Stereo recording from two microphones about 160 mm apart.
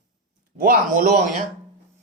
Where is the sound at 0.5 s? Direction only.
60° right (ahead or behind).